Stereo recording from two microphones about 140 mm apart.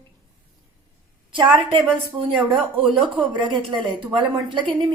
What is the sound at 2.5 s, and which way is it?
A woman's voice, 40° right (ahead or behind).